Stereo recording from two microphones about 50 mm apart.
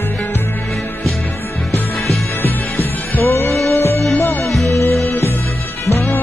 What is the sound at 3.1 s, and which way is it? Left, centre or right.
Music, left.